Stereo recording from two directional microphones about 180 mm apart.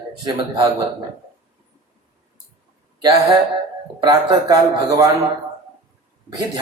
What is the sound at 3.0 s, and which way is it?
Speech, 20° right (ahead or behind).